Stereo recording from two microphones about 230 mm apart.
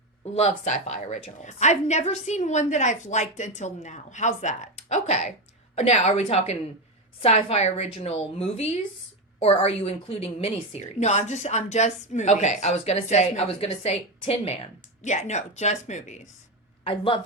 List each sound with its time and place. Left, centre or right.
0.3 s a woman's voice: left